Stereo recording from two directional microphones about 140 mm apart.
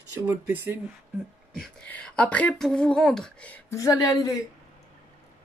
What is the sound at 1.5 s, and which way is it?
Speech, 5° left (ahead or behind).